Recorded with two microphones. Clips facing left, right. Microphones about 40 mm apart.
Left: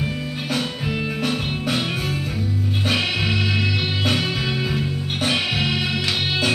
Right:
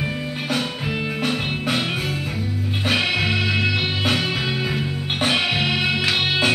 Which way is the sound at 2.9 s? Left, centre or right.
Centre.